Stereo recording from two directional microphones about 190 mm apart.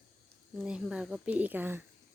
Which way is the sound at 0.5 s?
5° right (ahead or behind).